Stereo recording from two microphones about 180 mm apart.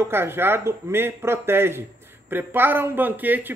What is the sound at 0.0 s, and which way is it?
Speech, 15° right (ahead or behind).